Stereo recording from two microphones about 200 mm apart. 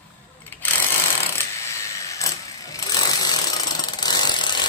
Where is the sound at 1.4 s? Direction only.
15° left (ahead or behind).